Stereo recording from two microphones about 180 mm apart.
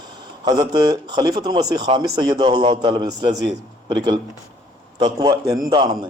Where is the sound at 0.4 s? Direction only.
25° right (ahead or behind).